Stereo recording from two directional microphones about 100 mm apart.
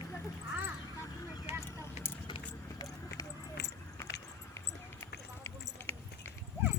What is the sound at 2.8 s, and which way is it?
Clip-clop, 35° left (ahead or behind).